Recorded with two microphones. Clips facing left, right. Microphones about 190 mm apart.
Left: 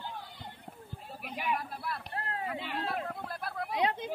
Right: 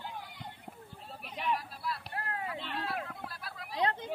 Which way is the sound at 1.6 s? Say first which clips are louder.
Left 2 dB; 55° left (ahead or behind).